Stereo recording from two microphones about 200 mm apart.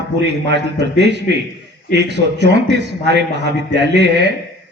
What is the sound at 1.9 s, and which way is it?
A man's voice, 60° right (ahead or behind).